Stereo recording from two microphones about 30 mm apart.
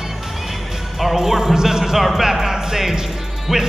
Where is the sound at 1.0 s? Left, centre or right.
Centre.